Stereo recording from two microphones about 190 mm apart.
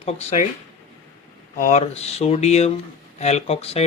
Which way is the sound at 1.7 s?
35° left (ahead or behind).